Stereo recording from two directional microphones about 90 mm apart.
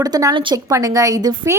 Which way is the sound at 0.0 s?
45° right (ahead or behind).